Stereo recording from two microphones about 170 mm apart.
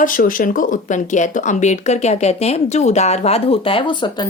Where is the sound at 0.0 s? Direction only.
55° left (ahead or behind).